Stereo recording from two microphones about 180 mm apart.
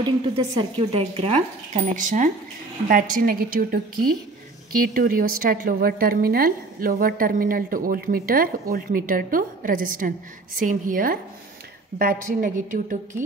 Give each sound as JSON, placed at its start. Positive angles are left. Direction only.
{"t": 0.0, "sound": "a woman's voice", "side_deg": -25}